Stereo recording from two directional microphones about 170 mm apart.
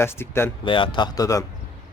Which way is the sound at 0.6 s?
30° left (ahead or behind).